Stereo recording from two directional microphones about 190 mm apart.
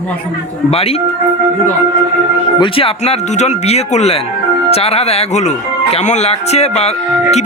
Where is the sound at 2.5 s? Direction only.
25° left (ahead or behind).